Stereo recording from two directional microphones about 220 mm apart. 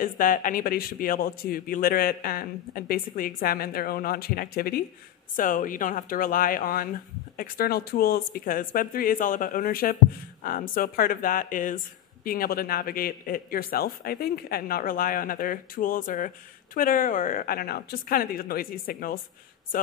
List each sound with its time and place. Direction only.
0.0 s a man's voice: 40° left (ahead or behind)